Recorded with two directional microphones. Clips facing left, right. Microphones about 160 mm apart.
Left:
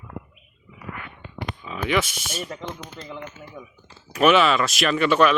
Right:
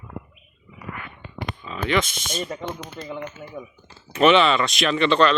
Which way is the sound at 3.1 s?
5° right (ahead or behind).